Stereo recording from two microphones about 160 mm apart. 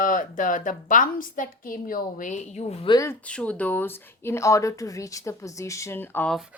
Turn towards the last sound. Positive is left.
turn(degrees=15)  # may be behind; listen again after turning